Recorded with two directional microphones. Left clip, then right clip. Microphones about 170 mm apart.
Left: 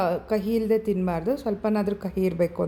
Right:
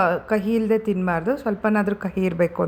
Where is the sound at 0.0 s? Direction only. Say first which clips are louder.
Right 4 dB; 10° right (ahead or behind).